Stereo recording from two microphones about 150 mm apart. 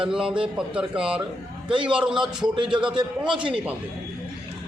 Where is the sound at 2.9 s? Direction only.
30° right (ahead or behind).